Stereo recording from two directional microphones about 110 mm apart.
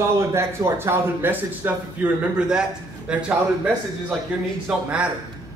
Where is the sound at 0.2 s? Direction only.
25° right (ahead or behind).